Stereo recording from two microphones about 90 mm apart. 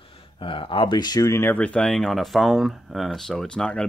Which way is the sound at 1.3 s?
25° left (ahead or behind).